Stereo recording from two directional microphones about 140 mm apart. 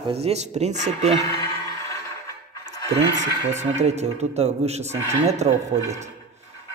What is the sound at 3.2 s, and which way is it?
Speech, 55° right (ahead or behind).